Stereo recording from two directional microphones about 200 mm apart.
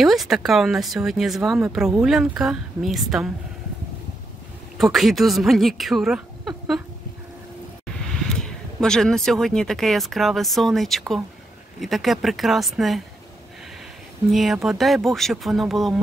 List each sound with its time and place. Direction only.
0.0 s speech: centre (ahead or behind)
4.7 s a woman's voice: centre (ahead or behind)
8.3 s speech: 5° left (ahead or behind)
14.3 s speech: centre (ahead or behind)